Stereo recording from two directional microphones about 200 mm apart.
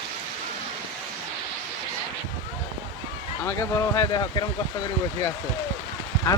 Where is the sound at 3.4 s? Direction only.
15° left (ahead or behind).